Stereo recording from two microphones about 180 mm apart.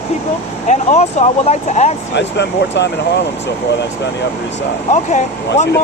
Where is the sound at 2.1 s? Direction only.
75° left (ahead or behind).